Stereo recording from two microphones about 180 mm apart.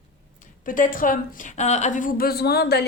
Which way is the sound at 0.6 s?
50° left (ahead or behind).